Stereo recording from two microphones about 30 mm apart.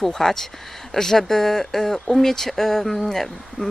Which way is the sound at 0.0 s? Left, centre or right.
Centre.